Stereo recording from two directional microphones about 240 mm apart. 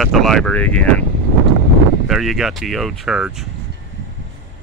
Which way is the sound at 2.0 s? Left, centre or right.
Centre.